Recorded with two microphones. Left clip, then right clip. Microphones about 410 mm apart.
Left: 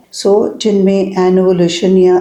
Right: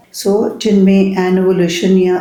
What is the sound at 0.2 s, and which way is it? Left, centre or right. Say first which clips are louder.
Speech: left 3 dB; left.